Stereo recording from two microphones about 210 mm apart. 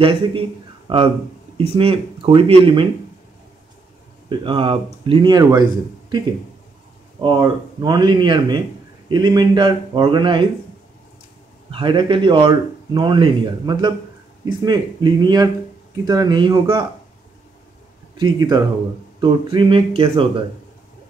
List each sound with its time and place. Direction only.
0.0 s speech: 25° right (ahead or behind)
4.3 s speech: 25° right (ahead or behind)
11.7 s speech: 25° right (ahead or behind)
18.1 s speech: 20° right (ahead or behind)